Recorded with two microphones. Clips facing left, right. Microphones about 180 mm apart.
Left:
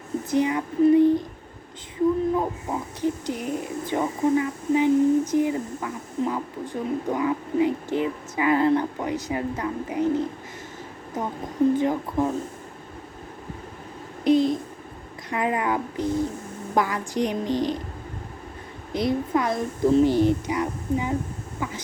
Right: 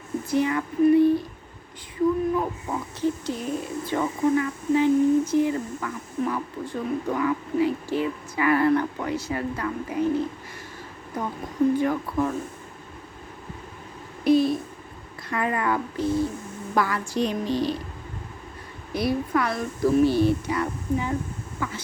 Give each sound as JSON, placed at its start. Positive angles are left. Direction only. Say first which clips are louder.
{"t": 0.3, "sound": "a woman's voice", "louder": "left 1 dB", "side_deg": 20}
{"t": 2.3, "sound": "speech", "louder": "left 1 dB", "side_deg": 25}
{"t": 14.3, "sound": "a sound", "louder": "even", "side_deg": 20}
{"t": 15.3, "sound": "a woman's voice", "louder": "left 1 dB", "side_deg": 15}
{"t": 18.9, "sound": "speech", "louder": "left 1 dB", "side_deg": 20}